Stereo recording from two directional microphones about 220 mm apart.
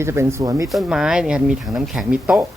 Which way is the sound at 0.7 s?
Centre (ahead or behind).